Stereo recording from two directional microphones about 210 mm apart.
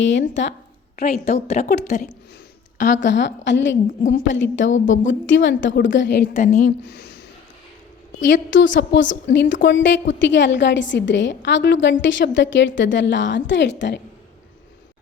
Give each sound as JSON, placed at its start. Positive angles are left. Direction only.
{"t": 0.0, "sound": "a woman's voice", "side_deg": 60}
{"t": 1.0, "sound": "a woman's voice", "side_deg": 30}
{"t": 3.0, "sound": "a woman's voice", "side_deg": 55}
{"t": 6.3, "sound": "a woman's voice", "side_deg": 35}
{"t": 6.8, "sound": "speech", "side_deg": 55}
{"t": 8.2, "sound": "a woman's voice", "side_deg": 60}